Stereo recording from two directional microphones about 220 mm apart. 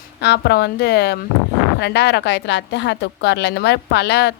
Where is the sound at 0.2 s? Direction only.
50° left (ahead or behind).